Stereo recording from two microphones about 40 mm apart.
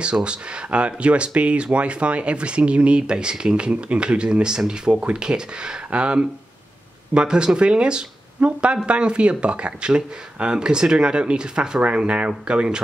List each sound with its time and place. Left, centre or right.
0.0 s speech: right